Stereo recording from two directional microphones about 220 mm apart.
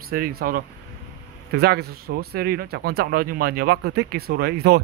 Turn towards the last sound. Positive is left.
turn(degrees=-45)  # may be behind; listen again after turning